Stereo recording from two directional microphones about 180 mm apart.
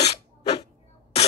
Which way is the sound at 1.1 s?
35° left (ahead or behind).